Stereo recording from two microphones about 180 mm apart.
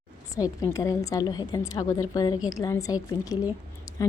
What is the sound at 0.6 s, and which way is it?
A woman's voice, 20° left (ahead or behind).